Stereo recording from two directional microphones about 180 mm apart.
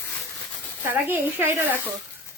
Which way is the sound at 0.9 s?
10° right (ahead or behind).